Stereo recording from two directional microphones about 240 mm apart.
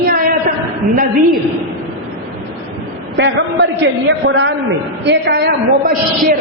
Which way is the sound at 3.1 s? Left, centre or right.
Right.